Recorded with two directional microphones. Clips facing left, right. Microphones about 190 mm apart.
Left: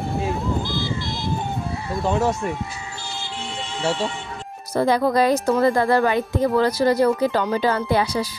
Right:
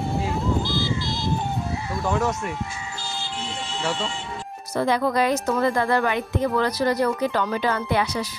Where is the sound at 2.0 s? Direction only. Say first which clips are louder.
Left 3 dB; 25° left (ahead or behind).